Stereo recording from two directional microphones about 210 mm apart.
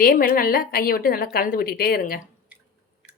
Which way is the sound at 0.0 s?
45° left (ahead or behind).